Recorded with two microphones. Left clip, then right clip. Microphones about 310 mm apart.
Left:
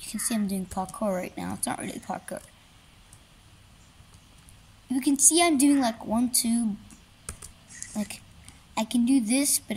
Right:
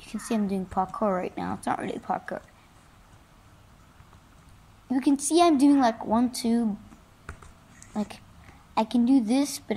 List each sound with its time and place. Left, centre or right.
0.3 s speech: left
4.9 s speech: left
7.8 s a sound: left
8.7 s speech: left